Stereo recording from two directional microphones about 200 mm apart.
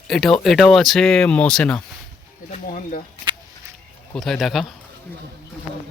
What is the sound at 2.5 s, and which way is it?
Speech, 40° left (ahead or behind).